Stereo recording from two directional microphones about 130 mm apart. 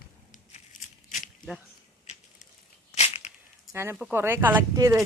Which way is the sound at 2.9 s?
55° left (ahead or behind).